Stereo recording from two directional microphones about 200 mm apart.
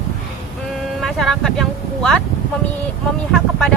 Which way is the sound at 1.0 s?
Centre (ahead or behind).